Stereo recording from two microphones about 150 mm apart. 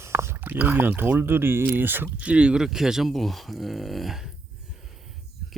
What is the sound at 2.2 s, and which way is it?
Speech, 10° right (ahead or behind).